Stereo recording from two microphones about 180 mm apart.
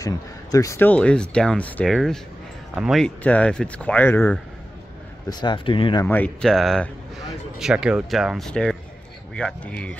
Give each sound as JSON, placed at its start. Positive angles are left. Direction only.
{"t": 0.0, "sound": "speech", "side_deg": 20}
{"t": 5.3, "sound": "speech", "side_deg": 25}
{"t": 6.0, "sound": "speech", "side_deg": 10}